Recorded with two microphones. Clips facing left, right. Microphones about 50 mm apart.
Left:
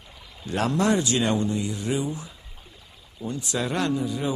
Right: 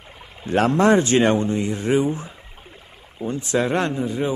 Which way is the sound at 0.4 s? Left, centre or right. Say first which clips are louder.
Right 6 dB; right.